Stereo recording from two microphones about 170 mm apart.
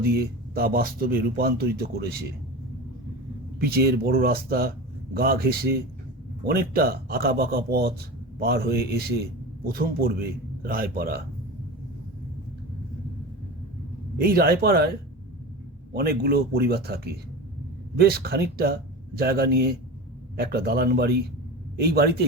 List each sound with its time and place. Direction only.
0.0 s speech: 65° right (ahead or behind)
3.6 s speech: 65° right (ahead or behind)
14.2 s speech: 60° right (ahead or behind)